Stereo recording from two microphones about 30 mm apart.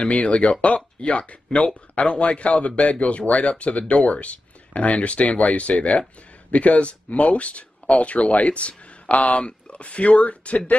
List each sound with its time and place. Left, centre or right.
0.1 s speech: left